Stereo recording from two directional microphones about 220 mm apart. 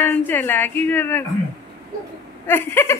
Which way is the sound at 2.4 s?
10° left (ahead or behind).